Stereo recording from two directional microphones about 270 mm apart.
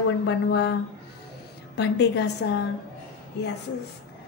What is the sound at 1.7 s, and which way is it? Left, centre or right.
A woman's voice, left.